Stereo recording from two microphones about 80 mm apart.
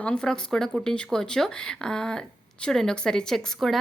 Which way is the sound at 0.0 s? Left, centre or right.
Centre.